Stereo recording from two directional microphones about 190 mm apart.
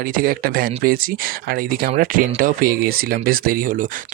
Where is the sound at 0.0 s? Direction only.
50° right (ahead or behind).